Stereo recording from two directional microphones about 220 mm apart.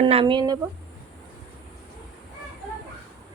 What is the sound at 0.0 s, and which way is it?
Speech, 25° right (ahead or behind).